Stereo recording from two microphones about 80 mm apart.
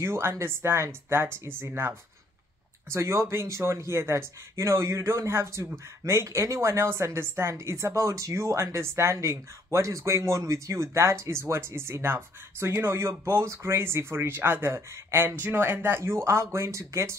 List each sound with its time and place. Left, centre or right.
0.0 s speech: right